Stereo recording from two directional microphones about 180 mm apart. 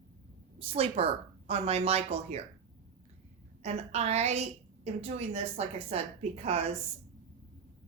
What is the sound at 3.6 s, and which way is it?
A woman's voice, 35° right (ahead or behind).